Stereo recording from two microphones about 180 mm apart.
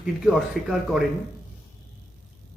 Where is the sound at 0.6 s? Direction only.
Centre (ahead or behind).